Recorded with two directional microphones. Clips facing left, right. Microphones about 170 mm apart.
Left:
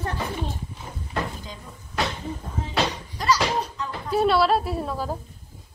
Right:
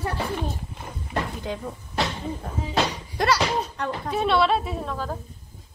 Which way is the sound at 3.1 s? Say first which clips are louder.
Right 1 dB; 65° right (ahead or behind).